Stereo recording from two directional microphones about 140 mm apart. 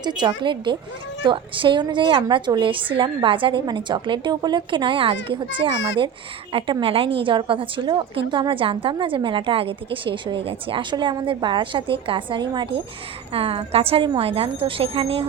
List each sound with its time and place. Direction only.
0.0 s a woman's voice: 30° right (ahead or behind)